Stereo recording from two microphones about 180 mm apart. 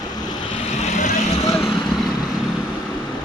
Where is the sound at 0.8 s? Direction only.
40° left (ahead or behind).